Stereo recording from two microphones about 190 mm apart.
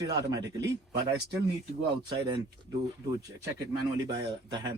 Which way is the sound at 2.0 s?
20° right (ahead or behind).